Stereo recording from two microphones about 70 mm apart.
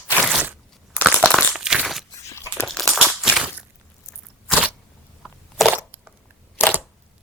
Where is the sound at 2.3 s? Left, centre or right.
Left.